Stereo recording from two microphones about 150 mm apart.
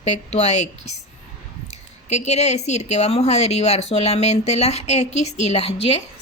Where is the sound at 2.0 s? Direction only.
50° left (ahead or behind).